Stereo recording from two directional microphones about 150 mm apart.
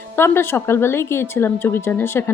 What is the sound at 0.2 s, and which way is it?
A woman's voice, 15° left (ahead or behind).